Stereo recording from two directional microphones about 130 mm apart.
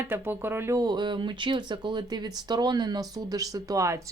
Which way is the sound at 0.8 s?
35° right (ahead or behind).